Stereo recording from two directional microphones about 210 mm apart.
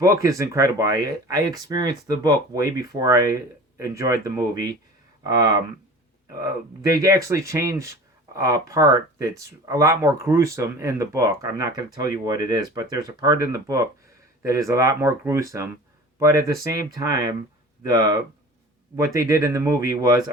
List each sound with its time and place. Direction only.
0.0 s speech: 15° right (ahead or behind)